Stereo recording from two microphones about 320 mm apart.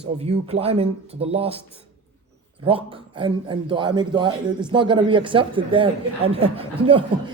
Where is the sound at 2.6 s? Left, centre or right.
Centre.